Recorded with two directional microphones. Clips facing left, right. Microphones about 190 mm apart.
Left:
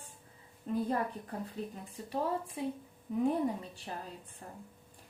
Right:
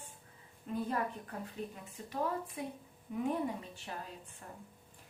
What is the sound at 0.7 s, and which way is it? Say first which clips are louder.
Speech: left 4 dB; 35° left (ahead or behind).